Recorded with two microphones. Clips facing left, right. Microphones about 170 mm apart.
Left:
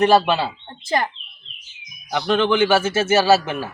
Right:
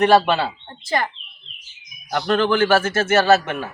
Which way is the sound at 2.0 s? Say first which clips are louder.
Even; centre (ahead or behind).